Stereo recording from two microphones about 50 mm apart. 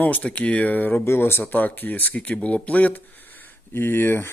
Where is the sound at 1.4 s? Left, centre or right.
Left.